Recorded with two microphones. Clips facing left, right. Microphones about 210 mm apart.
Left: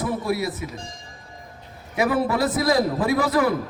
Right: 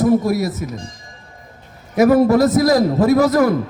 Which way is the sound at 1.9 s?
40° right (ahead or behind).